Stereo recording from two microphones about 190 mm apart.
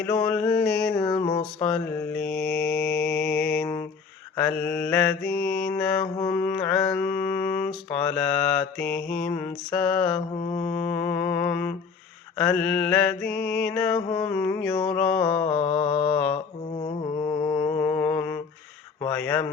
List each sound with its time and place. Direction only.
0.2 s mantra: 5° left (ahead or behind)
0.9 s humming: 25° left (ahead or behind)
1.7 s mantra: 5° left (ahead or behind)
14.7 s humming: 25° left (ahead or behind)
14.9 s mantra: 5° left (ahead or behind)
15.2 s humming: 25° left (ahead or behind)
16.8 s music: 25° left (ahead or behind)
17.8 s mantra: 10° left (ahead or behind)